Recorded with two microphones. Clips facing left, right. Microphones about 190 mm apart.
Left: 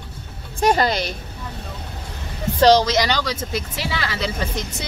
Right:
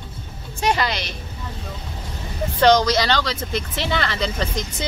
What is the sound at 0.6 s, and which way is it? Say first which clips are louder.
Speech: left 4 dB; 45° left (ahead or behind).